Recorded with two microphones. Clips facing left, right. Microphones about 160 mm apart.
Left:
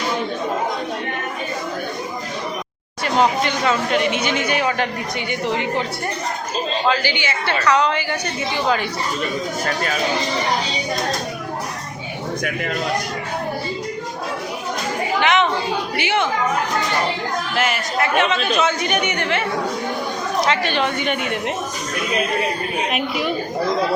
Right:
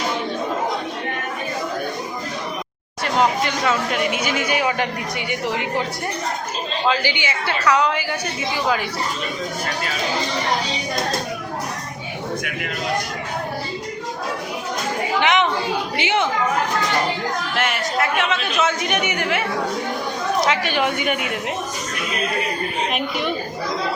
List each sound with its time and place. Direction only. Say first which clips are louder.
3.0 s speech: left 1 dB; centre (ahead or behind)
6.8 s speech: right 2 dB; 15° right (ahead or behind)
15.2 s a sound: left 1 dB; 15° right (ahead or behind)
16.0 s speech: even; 20° right (ahead or behind)
17.5 s speech: left 2 dB; centre (ahead or behind)
20.5 s speech: left 1 dB; 10° right (ahead or behind)
22.9 s speech: left 1 dB; 5° left (ahead or behind)